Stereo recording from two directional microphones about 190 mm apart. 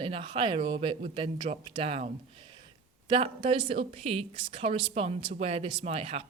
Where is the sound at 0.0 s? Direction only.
25° right (ahead or behind).